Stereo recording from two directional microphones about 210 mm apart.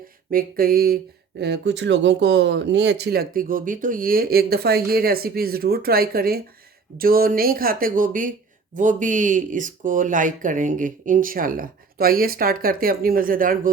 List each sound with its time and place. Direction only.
0.3 s speech: 45° right (ahead or behind)
1.4 s speech: 55° right (ahead or behind)